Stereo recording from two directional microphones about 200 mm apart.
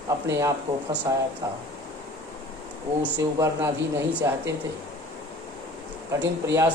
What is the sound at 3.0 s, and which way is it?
A man's voice, 15° right (ahead or behind).